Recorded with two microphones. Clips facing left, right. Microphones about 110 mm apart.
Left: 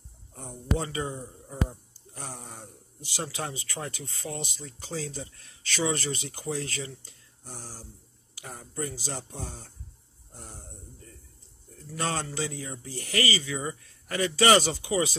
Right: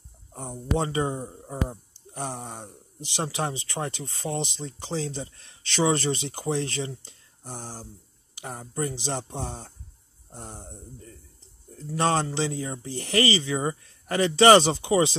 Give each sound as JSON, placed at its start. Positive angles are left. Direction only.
{"t": 0.3, "sound": "speech", "side_deg": -30}
{"t": 1.5, "sound": "a sound", "side_deg": -25}
{"t": 2.4, "sound": "speech", "side_deg": -30}
{"t": 7.6, "sound": "speech", "side_deg": -45}
{"t": 8.4, "sound": "speech", "side_deg": -25}